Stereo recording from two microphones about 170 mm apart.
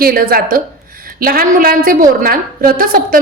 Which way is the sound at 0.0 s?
60° right (ahead or behind).